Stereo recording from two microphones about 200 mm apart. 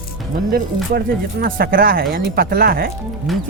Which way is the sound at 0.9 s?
50° right (ahead or behind).